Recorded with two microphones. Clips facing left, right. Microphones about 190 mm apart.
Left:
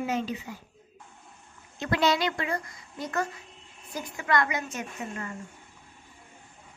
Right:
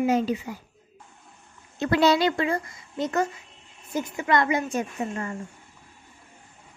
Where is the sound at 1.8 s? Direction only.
35° right (ahead or behind).